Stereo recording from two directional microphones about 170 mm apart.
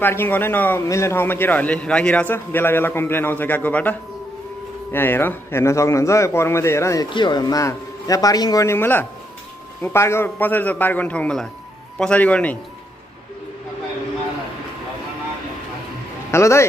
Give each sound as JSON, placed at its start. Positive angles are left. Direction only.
{"t": 0.0, "sound": "a man's voice", "side_deg": 10}
{"t": 4.9, "sound": "a man's voice", "side_deg": 10}
{"t": 16.3, "sound": "a man's voice", "side_deg": 15}